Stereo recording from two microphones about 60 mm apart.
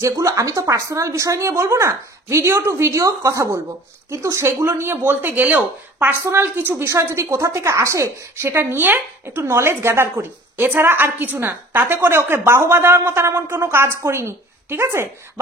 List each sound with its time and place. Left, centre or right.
0.0 s speech: right
6.2 s a woman's voice: right